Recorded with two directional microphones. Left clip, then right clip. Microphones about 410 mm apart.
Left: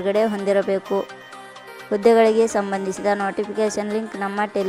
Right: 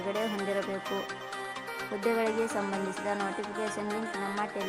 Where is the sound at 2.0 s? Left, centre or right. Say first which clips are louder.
Left 15 dB; centre.